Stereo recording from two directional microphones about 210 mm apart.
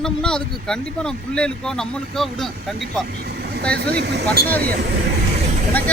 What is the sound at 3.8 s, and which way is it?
Speech, 50° right (ahead or behind).